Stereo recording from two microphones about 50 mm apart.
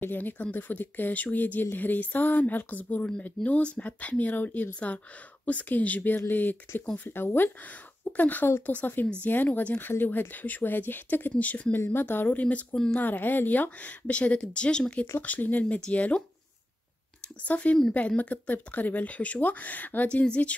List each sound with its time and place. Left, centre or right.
0.0 s speech: left
9.8 s speech: left
11.7 s speech: left
12.4 s speech: left
15.2 s speech: left
17.4 s speech: left